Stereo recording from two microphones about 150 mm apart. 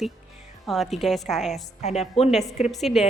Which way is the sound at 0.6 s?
Centre (ahead or behind).